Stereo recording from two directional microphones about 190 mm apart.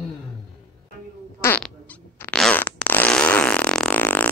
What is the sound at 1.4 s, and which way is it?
Fart, 10° left (ahead or behind).